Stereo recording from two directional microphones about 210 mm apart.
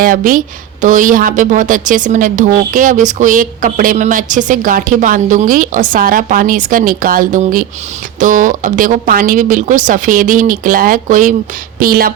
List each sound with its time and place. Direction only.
0.0 s a woman's voice: 40° right (ahead or behind)